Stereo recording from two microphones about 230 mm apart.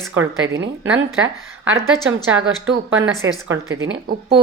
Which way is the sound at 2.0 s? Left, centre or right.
Right.